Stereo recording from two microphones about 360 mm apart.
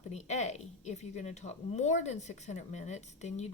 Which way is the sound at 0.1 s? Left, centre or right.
Centre.